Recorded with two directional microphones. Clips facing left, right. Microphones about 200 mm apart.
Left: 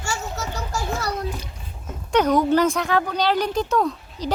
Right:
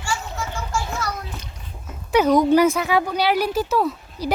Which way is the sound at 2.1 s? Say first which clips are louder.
Right 2 dB; 10° right (ahead or behind).